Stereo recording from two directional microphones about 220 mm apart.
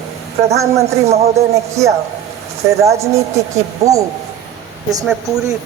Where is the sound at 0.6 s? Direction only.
15° right (ahead or behind).